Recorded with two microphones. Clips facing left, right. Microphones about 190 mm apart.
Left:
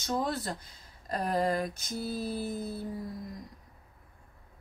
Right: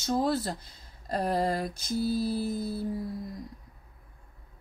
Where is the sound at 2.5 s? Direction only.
5° right (ahead or behind).